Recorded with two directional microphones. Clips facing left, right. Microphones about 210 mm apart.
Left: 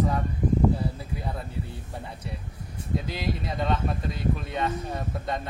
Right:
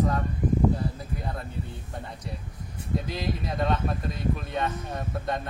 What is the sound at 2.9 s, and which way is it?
Speech, centre (ahead or behind).